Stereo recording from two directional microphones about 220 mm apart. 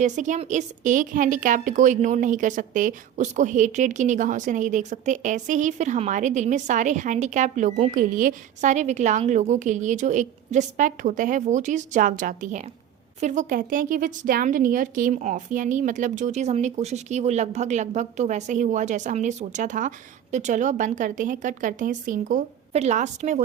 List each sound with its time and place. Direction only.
0.0 s a woman's voice: 35° right (ahead or behind)